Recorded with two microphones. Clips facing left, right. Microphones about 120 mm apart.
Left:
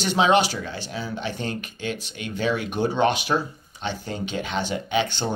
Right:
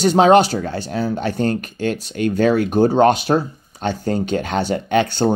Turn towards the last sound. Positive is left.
turn(degrees=-50)  # may be behind; listen again after turning